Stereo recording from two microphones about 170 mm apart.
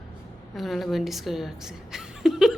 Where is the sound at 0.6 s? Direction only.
Centre (ahead or behind).